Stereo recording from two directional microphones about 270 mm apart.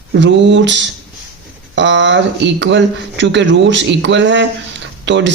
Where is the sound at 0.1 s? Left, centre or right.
Right.